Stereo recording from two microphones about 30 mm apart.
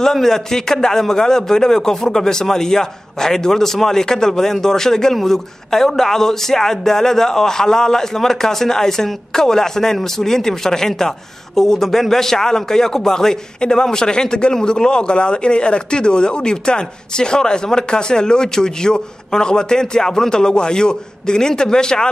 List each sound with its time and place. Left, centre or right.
0.1 s speech: centre